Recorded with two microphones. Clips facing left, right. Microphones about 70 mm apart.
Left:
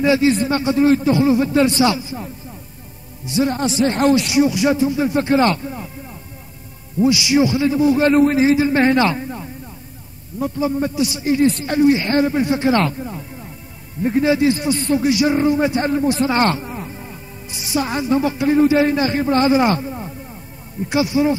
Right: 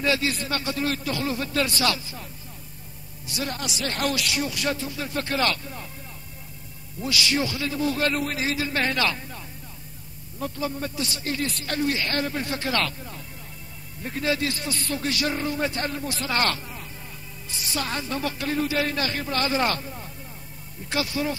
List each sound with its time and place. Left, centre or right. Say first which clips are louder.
0.0 s a man's voice: left 10 dB; left
7.0 s a man's voice: left 11 dB; centre